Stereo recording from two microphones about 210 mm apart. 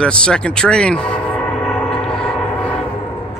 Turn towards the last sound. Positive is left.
turn(degrees=5)  # may be behind; listen again after turning